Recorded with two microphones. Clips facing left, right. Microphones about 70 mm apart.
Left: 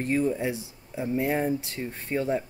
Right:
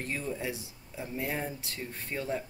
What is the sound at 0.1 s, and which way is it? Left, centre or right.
Speech, left.